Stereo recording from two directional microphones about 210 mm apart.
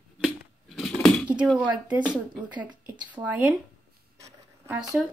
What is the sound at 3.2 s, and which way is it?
Speech, 20° right (ahead or behind).